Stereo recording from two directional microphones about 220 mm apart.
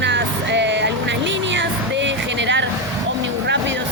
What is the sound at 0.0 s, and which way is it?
Vehicle, 55° right (ahead or behind).